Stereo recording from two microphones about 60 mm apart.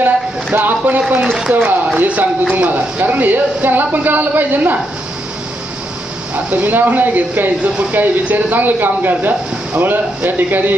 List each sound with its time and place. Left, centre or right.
0.0 s speech: right
1.2 s speech: centre
1.5 s speech: right
6.3 s speech: right